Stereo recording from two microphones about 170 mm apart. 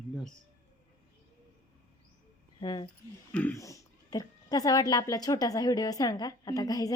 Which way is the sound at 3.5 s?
20° left (ahead or behind).